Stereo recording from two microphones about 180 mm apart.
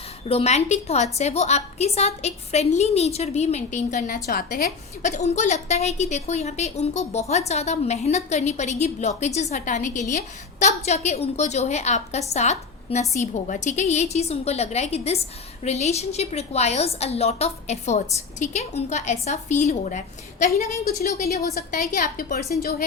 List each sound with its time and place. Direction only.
0.3 s a woman's voice: 35° left (ahead or behind)
20.8 s a woman's voice: 60° left (ahead or behind)